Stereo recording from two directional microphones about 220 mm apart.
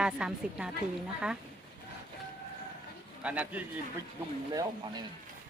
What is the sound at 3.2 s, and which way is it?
A woman's voice, 5° right (ahead or behind).